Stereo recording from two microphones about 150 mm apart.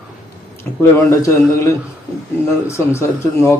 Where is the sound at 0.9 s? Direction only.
20° left (ahead or behind).